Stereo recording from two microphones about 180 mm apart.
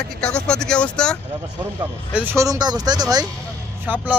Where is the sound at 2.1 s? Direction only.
15° right (ahead or behind).